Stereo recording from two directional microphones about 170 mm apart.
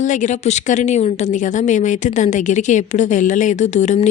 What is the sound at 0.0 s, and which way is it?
A woman's voice, 45° left (ahead or behind).